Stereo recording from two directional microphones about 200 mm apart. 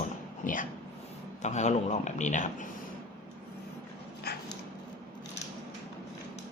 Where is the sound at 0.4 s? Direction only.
40° left (ahead or behind).